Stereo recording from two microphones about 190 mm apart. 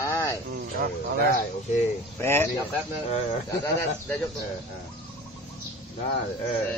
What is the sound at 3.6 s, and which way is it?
Speech, 10° left (ahead or behind).